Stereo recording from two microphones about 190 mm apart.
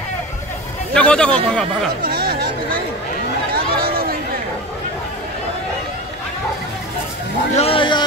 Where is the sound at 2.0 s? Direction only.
55° right (ahead or behind).